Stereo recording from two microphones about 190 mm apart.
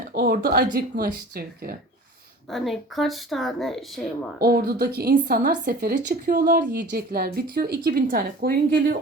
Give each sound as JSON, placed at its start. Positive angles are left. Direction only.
{"t": 0.1, "sound": "speech", "side_deg": -50}
{"t": 2.5, "sound": "speech", "side_deg": 0}
{"t": 4.4, "sound": "speech", "side_deg": -55}